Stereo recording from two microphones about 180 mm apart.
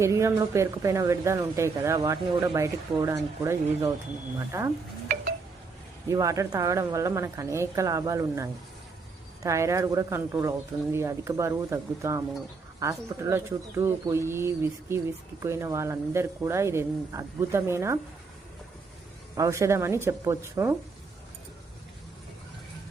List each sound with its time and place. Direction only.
0.0 s speech: 15° right (ahead or behind)
6.1 s speech: 20° right (ahead or behind)
19.4 s speech: 15° right (ahead or behind)